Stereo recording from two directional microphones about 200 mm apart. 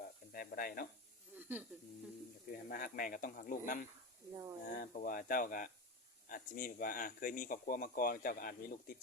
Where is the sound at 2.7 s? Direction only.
45° left (ahead or behind).